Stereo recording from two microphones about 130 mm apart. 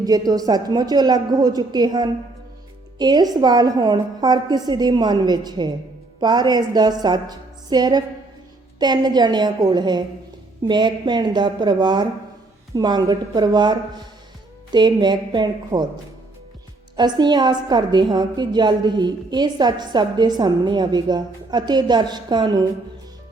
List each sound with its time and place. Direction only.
0.0 s a woman's voice: 30° right (ahead or behind)
17.0 s a woman's voice: 35° right (ahead or behind)